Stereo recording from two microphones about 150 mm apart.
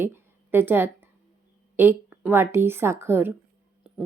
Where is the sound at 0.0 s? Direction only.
15° right (ahead or behind).